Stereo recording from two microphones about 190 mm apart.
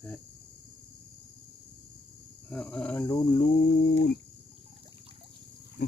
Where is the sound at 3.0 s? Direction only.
25° left (ahead or behind).